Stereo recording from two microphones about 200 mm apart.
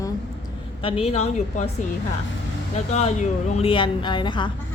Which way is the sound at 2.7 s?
35° left (ahead or behind).